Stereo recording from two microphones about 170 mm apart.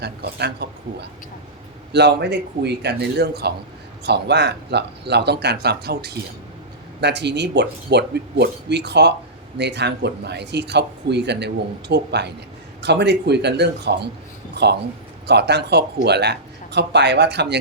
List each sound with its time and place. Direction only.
0.0 s speech: 75° right (ahead or behind)
7.0 s speech: 85° right